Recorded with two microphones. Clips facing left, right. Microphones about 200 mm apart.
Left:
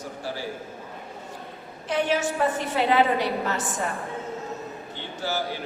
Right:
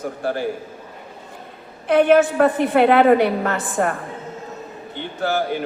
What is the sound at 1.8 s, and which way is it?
A woman's voice, 55° right (ahead or behind).